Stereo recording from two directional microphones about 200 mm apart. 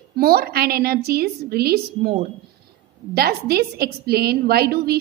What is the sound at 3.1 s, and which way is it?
A woman's voice, 50° right (ahead or behind).